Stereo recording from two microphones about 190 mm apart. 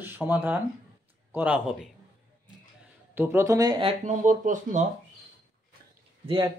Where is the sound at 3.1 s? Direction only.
10° right (ahead or behind); by 4.8 s 40° right (ahead or behind).